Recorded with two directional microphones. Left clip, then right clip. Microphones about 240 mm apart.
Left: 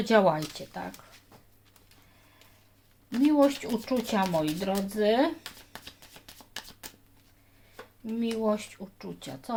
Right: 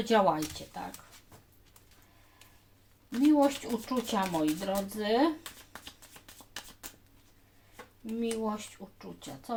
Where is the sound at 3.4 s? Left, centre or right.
Left.